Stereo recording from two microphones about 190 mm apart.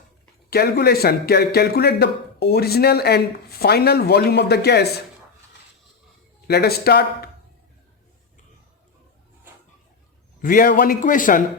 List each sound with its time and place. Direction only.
0.5 s speech: 55° left (ahead or behind)
6.5 s speech: 55° left (ahead or behind)
10.4 s a man's voice: 45° left (ahead or behind)